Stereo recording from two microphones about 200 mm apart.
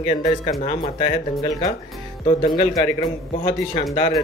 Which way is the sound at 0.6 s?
30° left (ahead or behind).